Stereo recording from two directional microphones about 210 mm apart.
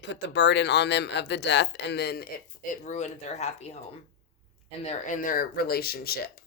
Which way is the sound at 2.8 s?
35° left (ahead or behind).